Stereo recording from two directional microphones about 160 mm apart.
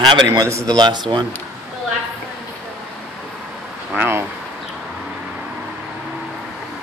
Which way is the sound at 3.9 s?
15° right (ahead or behind).